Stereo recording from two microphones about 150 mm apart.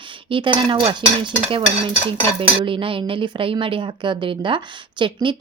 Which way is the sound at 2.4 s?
35° right (ahead or behind).